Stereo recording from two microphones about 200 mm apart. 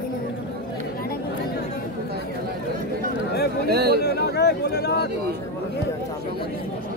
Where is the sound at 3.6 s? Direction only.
50° right (ahead or behind).